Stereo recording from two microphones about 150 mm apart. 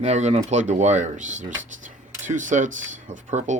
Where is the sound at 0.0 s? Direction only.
50° right (ahead or behind).